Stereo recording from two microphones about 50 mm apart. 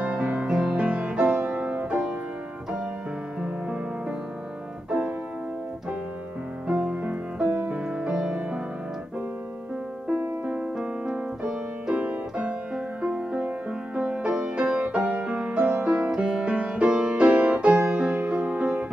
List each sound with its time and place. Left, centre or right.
0.0 s music: right
6.8 s music: right
10.4 s music: right
16.1 s music: centre